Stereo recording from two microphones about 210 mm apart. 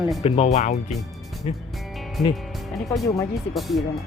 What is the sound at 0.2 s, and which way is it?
Speech, 30° left (ahead or behind).